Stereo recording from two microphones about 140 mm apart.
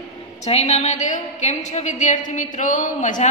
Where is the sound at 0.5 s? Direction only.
50° left (ahead or behind).